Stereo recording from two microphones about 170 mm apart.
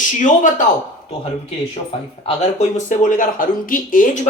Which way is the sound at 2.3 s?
45° left (ahead or behind).